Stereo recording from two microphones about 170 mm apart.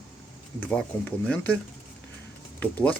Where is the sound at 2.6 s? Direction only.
10° left (ahead or behind).